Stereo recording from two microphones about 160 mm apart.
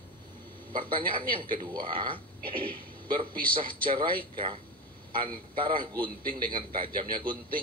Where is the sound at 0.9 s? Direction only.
30° right (ahead or behind).